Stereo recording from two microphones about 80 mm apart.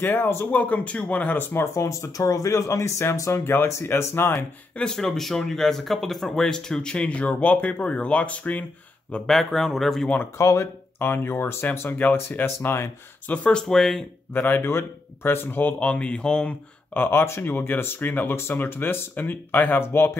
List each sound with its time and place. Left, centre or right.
0.0 s speech: left
1.8 s speech: left
4.7 s speech: centre
9.1 s speech: centre
10.3 s speech: left
12.5 s speech: left
13.3 s speech: centre
14.3 s speech: left
15.8 s speech: centre
16.9 s speech: left